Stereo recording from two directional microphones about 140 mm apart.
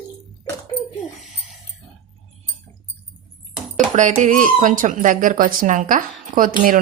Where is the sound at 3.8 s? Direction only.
60° right (ahead or behind).